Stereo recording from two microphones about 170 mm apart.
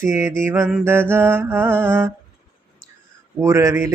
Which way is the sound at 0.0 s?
15° right (ahead or behind).